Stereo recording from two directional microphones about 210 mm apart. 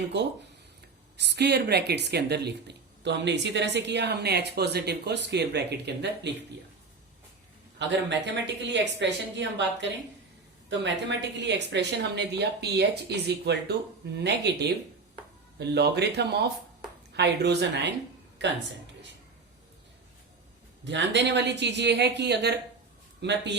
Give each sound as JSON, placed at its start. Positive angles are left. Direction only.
{"t": 0.1, "sound": "a woman's voice", "side_deg": -55}
{"t": 7.8, "sound": "a woman's voice", "side_deg": -55}
{"t": 20.8, "sound": "a woman's voice", "side_deg": -55}